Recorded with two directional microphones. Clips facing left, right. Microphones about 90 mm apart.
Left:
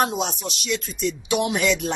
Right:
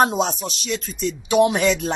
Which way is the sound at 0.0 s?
40° right (ahead or behind).